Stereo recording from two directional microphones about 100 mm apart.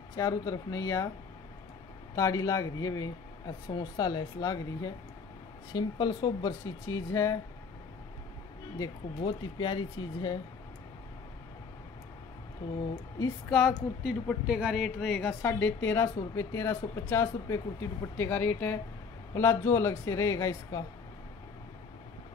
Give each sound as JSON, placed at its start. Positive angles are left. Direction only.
{"t": 0.1, "sound": "speech", "side_deg": 35}
{"t": 2.1, "sound": "speech", "side_deg": 35}
{"t": 6.6, "sound": "speech", "side_deg": 30}
{"t": 8.7, "sound": "speech", "side_deg": 45}
{"t": 13.5, "sound": "a woman's voice", "side_deg": 0}
{"t": 15.0, "sound": "speech", "side_deg": 5}
{"t": 15.4, "sound": "a woman's voice", "side_deg": 20}